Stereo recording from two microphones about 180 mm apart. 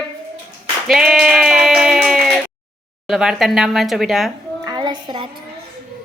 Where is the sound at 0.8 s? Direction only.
Centre (ahead or behind).